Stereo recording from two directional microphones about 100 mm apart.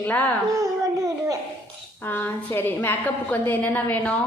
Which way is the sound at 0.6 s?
35° right (ahead or behind).